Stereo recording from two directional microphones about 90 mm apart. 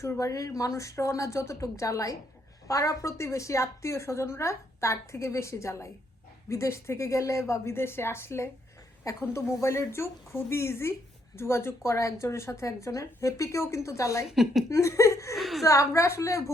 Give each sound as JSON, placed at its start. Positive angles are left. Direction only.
{"t": 0.0, "sound": "a woman's voice", "side_deg": 35}
{"t": 14.3, "sound": "a woman's voice", "side_deg": -5}
{"t": 14.7, "sound": "a woman's voice", "side_deg": 35}
{"t": 15.4, "sound": "a woman's voice", "side_deg": 0}
{"t": 15.6, "sound": "a woman's voice", "side_deg": 35}